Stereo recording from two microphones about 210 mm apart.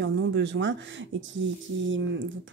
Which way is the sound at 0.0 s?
55° right (ahead or behind).